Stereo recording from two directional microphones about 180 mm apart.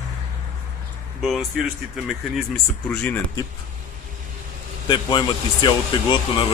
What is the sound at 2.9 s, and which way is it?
Speech, 5° left (ahead or behind).